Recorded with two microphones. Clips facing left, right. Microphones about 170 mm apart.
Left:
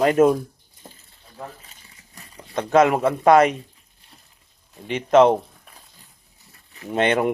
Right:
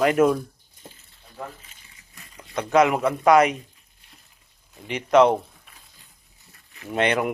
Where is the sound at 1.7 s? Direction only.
35° left (ahead or behind).